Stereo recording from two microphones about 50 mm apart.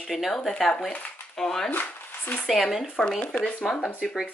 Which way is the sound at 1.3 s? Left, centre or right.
Centre.